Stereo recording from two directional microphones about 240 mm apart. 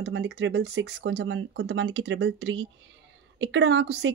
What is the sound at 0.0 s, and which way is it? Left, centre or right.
Speech, right.